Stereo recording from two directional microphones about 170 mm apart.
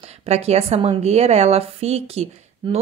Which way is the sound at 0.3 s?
40° right (ahead or behind).